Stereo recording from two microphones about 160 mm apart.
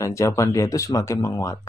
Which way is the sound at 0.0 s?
20° left (ahead or behind).